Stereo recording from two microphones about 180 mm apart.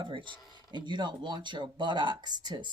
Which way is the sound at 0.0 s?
25° right (ahead or behind).